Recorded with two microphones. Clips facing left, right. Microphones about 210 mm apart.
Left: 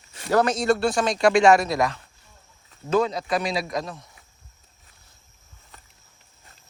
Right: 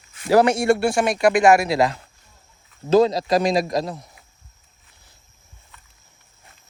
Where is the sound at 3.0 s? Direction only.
35° right (ahead or behind).